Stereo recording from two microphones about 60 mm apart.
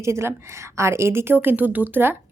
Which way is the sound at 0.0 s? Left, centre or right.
Right.